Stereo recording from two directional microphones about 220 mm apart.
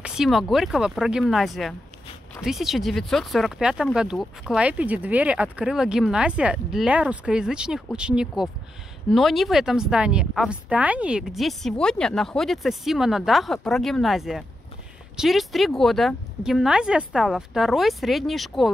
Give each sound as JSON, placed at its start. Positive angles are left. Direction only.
{"t": 0.0, "sound": "speech", "side_deg": 0}